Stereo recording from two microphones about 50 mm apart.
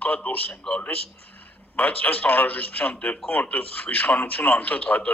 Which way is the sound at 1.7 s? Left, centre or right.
Left.